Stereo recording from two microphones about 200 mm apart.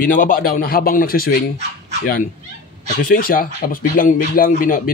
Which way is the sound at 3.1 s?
45° left (ahead or behind).